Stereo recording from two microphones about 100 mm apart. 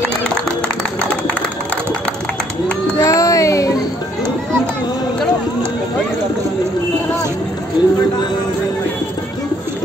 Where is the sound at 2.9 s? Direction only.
35° left (ahead or behind).